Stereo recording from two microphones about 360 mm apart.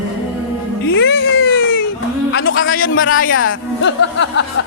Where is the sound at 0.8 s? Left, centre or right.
Left.